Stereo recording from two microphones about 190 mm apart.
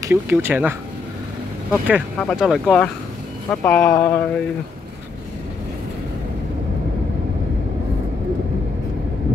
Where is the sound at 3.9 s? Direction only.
15° left (ahead or behind).